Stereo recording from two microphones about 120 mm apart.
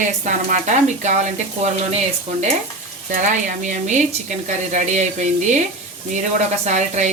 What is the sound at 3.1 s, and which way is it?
Speech, 90° right.